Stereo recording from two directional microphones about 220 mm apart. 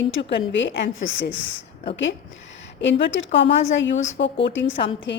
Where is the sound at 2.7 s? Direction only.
55° left (ahead or behind).